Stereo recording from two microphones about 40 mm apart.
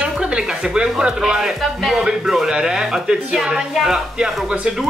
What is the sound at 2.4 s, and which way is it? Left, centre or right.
Speech, centre.